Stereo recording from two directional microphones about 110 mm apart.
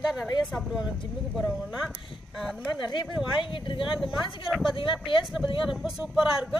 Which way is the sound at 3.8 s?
5° right (ahead or behind).